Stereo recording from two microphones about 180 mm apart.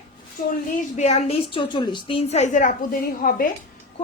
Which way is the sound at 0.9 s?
40° left (ahead or behind).